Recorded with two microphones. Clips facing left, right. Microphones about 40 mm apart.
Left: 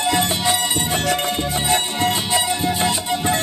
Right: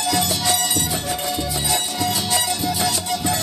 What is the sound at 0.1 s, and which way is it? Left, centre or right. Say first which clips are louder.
Music: even; left.